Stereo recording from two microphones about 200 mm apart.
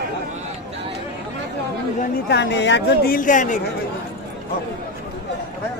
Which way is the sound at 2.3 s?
60° left (ahead or behind).